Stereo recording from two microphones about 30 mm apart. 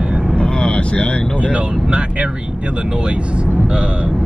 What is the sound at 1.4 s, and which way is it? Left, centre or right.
Speech, right.